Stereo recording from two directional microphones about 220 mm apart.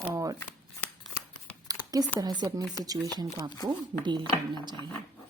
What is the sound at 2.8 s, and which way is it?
Speech, 15° right (ahead or behind).